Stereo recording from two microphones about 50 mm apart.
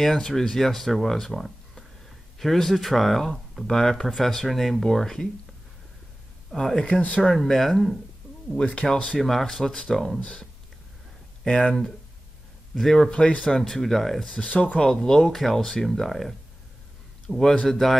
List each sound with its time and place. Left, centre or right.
0.0 s speech: centre
6.5 s speech: centre
6.8 s speech: left
7.4 s speech: centre
8.5 s speech: left; by 10.2 s centre
11.4 s speech: centre
13.1 s speech: centre
14.3 s speech: left; by 16.3 s centre
17.3 s speech: centre
17.6 s speech: centre